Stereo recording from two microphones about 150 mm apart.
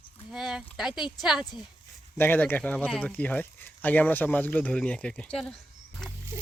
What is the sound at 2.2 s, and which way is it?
Speech, 10° left (ahead or behind).